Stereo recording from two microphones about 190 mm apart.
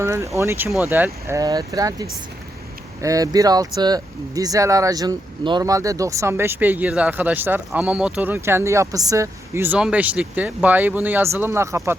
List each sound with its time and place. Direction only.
0.0 s speech: 15° right (ahead or behind)